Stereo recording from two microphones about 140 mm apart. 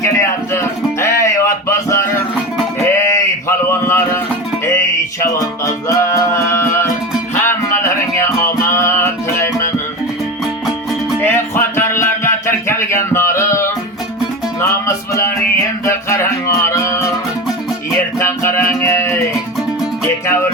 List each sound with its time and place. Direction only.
0.0 s music: 20° left (ahead or behind)
2.8 s a sound: 20° left (ahead or behind)
4.6 s music: 20° left (ahead or behind)
11.2 s music: 15° left (ahead or behind)
18.2 s music: 20° left (ahead or behind)